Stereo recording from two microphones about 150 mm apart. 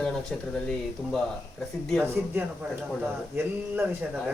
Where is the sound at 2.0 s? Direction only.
15° right (ahead or behind).